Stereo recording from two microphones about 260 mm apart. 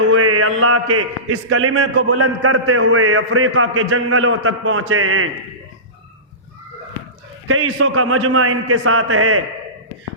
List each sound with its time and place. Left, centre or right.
0.1 s mantra: right
1.5 s a man's voice: right
7.4 s a man's voice: right